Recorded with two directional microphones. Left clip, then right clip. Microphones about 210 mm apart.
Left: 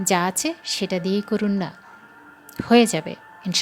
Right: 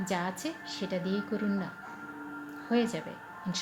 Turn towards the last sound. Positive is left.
turn(degrees=40)  # may be behind; listen again after turning